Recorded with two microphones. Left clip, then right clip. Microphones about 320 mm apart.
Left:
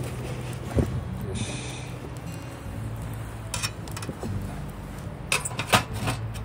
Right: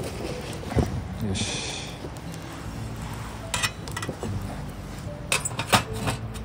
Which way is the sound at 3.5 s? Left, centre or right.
Centre.